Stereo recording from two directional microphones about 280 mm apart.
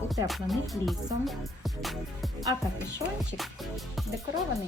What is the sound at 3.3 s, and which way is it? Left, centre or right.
Music, centre.